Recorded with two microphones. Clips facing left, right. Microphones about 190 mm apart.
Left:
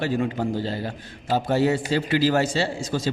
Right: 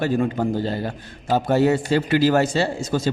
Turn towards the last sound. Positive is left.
turn(degrees=-50)  # may be behind; listen again after turning